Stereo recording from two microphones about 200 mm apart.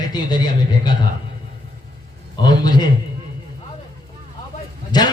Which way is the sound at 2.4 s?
20° left (ahead or behind).